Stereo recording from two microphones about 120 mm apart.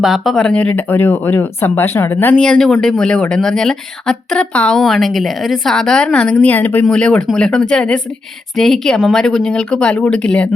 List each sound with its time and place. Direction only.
0.0 s a woman's voice: centre (ahead or behind)